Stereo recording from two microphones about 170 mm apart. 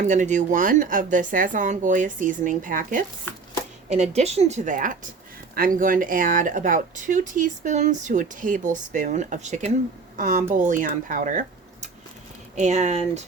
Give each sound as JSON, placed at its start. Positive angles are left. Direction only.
{"t": 0.0, "sound": "speech", "side_deg": -45}
{"t": 3.8, "sound": "a woman's voice", "side_deg": -40}